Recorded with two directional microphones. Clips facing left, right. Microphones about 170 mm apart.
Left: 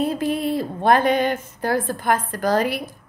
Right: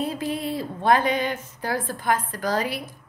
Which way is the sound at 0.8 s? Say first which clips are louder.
Left 4 dB; 55° left (ahead or behind).